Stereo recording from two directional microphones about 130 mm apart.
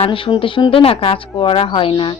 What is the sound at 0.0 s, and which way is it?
A woman's voice, 45° left (ahead or behind).